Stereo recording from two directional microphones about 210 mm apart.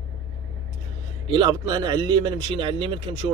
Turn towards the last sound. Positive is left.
turn(degrees=-25)  # may be behind; listen again after turning